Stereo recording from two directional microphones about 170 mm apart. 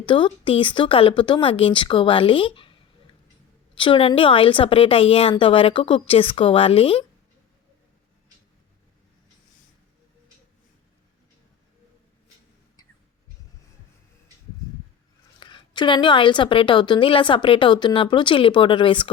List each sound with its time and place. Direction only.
0.0 s a woman's voice: 30° left (ahead or behind)
3.8 s a woman's voice: 30° left (ahead or behind)
15.4 s a woman's voice: 30° left (ahead or behind)